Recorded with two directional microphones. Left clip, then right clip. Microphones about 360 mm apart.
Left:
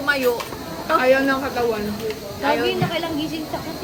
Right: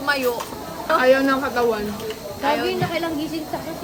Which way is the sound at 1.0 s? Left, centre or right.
Right.